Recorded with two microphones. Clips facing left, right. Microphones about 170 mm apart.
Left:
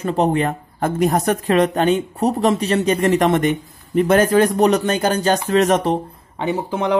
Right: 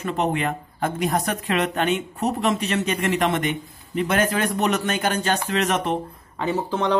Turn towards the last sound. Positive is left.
turn(degrees=15)  # may be behind; listen again after turning